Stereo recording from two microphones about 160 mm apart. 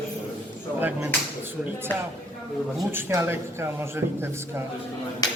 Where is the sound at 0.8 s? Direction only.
10° right (ahead or behind).